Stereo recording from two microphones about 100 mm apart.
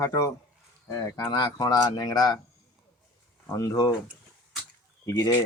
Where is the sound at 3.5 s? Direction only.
40° left (ahead or behind).